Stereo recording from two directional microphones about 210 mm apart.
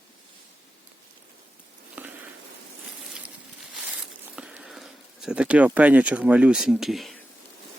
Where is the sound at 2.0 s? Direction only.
10° right (ahead or behind).